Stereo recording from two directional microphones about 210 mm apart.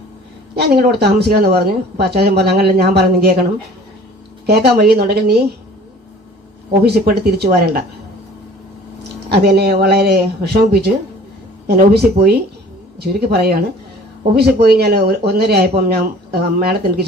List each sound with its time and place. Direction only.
0.5 s speech: 50° right (ahead or behind)
4.4 s speech: 50° right (ahead or behind)
6.8 s speech: 50° right (ahead or behind)
9.3 s speech: 50° right (ahead or behind)